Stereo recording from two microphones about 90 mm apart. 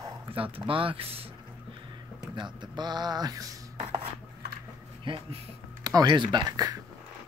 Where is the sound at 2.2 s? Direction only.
60° right (ahead or behind).